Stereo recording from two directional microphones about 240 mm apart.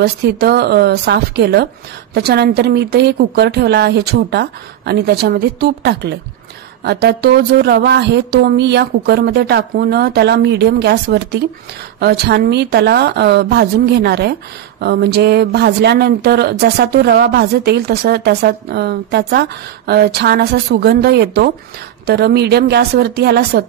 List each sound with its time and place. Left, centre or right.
0.0 s a woman's voice: right